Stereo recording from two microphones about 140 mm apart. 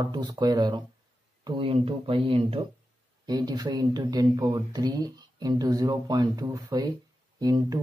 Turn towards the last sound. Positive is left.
turn(degrees=-25)  # may be behind; listen again after turning